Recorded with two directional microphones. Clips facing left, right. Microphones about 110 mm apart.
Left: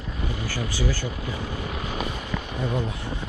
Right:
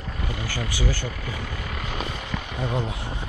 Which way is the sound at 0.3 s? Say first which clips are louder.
Even; 60° right (ahead or behind).